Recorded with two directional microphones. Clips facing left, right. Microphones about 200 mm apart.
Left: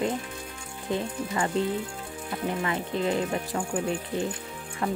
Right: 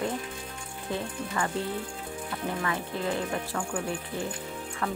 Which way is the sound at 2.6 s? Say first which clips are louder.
Left 4 dB; 20° left (ahead or behind).